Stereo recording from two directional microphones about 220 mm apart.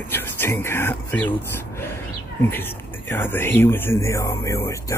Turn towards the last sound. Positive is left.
turn(degrees=15)  # may be behind; listen again after turning